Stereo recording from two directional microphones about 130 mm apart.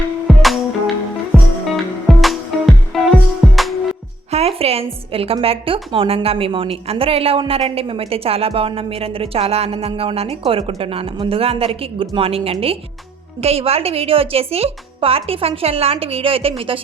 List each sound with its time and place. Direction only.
0.3 s music: centre (ahead or behind)
4.3 s a woman's voice: 55° right (ahead or behind)